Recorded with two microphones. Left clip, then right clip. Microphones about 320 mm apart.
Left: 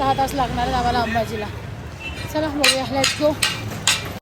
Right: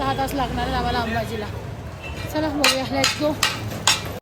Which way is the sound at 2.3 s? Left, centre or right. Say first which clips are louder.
Left 1 dB; centre.